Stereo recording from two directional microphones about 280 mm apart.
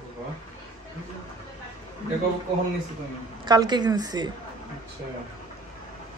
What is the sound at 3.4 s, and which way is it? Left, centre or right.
Speech, centre.